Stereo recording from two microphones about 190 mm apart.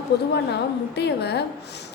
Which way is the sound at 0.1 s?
60° left (ahead or behind).